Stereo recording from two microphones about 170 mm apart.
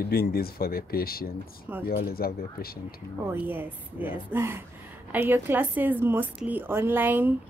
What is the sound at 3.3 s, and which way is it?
A woman's voice, 10° right (ahead or behind).